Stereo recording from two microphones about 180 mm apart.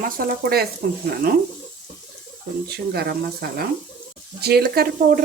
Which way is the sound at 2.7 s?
60° right (ahead or behind).